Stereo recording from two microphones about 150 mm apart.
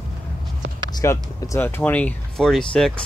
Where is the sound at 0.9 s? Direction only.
25° left (ahead or behind).